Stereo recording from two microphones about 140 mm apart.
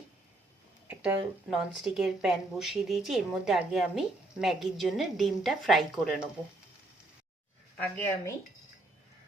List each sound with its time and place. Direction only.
0.9 s speech: 5° right (ahead or behind)
7.8 s speech: 15° left (ahead or behind)